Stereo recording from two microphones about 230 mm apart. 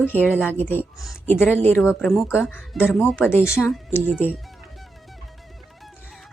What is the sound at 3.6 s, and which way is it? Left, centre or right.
Speech, centre.